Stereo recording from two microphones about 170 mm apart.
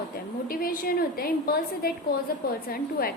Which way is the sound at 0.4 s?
60° left (ahead or behind).